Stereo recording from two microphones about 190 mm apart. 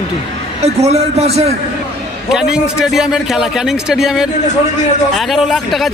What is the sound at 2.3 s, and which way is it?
A man's voice, 5° right (ahead or behind).